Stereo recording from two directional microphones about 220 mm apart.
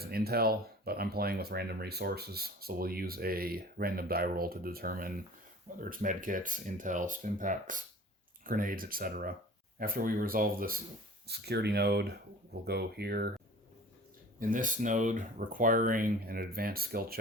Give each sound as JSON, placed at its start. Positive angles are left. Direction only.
{"t": 0.0, "sound": "speech", "side_deg": -45}
{"t": 14.3, "sound": "speech", "side_deg": -35}